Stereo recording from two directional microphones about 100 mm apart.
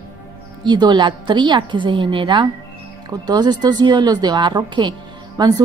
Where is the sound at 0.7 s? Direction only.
50° right (ahead or behind).